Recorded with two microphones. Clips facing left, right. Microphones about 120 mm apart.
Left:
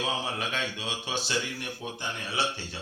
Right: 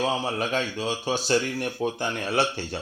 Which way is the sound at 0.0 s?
40° right (ahead or behind).